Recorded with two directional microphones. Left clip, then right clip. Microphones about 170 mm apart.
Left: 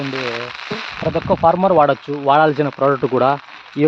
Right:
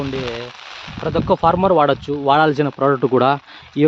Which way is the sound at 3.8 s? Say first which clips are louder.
Right 1 dB; 55° right (ahead or behind).